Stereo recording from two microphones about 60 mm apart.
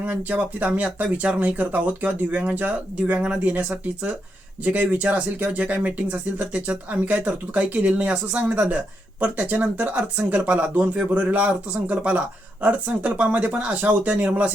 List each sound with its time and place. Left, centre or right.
0.0 s speech: right